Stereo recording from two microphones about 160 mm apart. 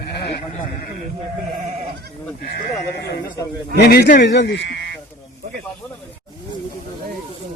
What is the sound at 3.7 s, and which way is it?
Speech, 80° left.